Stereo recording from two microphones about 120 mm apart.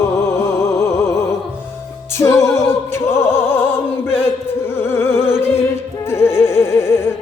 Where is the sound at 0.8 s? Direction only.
25° left (ahead or behind).